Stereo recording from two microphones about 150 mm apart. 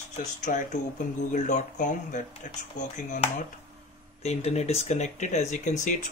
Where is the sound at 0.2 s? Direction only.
55° left (ahead or behind).